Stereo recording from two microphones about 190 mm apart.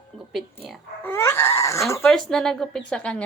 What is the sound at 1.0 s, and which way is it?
Child singing, 10° left (ahead or behind).